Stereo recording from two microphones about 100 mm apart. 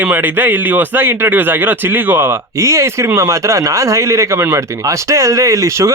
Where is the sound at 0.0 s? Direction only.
20° right (ahead or behind).